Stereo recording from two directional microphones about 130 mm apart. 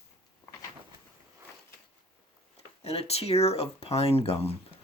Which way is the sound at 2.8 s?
50° left (ahead or behind).